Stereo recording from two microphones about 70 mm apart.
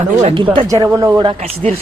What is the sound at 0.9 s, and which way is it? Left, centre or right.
Speech, right.